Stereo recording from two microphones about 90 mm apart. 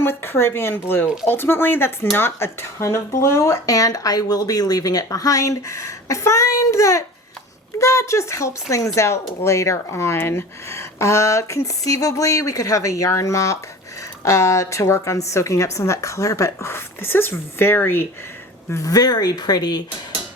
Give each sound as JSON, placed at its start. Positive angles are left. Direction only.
{"t": 0.0, "sound": "speech", "side_deg": 25}
{"t": 1.0, "sound": "speech", "side_deg": -5}
{"t": 1.3, "sound": "speech", "side_deg": 25}
{"t": 18.7, "sound": "speech", "side_deg": 40}